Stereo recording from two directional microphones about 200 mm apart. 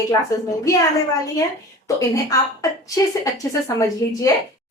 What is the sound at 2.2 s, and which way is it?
A woman's voice, 15° left (ahead or behind).